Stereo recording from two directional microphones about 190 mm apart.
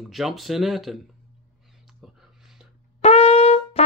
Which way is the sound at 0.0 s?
Centre (ahead or behind).